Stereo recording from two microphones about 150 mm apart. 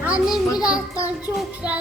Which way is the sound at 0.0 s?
10° right (ahead or behind).